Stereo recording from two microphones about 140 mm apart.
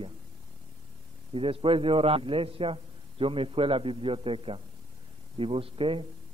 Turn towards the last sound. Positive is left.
turn(degrees=-40)  # may be behind; listen again after turning